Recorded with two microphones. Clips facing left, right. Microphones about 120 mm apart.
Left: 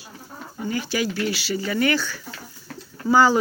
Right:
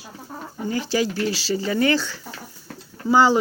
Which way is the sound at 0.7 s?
30° right (ahead or behind).